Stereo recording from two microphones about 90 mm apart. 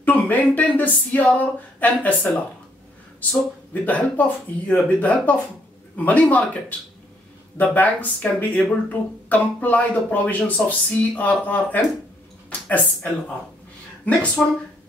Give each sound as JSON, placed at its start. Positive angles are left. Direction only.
{"t": 0.0, "sound": "speech", "side_deg": 20}
{"t": 7.5, "sound": "speech", "side_deg": 20}
{"t": 12.4, "sound": "a sound", "side_deg": 20}
{"t": 14.0, "sound": "speech", "side_deg": 15}